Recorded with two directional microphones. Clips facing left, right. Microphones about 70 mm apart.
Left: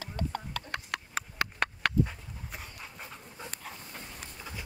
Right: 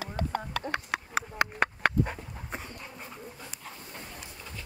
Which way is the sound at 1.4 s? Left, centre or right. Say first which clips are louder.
Right 4 dB; right.